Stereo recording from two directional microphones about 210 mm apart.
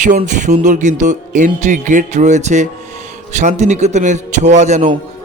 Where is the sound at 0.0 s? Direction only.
35° right (ahead or behind).